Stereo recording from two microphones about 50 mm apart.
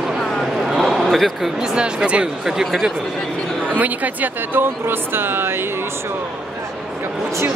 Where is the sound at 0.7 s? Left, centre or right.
Centre.